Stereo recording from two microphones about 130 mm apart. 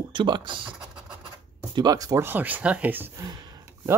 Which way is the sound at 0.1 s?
35° right (ahead or behind).